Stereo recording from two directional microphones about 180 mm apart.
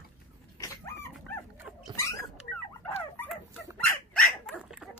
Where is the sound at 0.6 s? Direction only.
15° left (ahead or behind).